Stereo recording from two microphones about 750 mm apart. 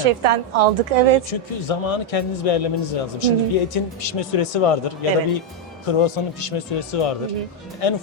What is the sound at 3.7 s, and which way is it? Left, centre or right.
Speech, left.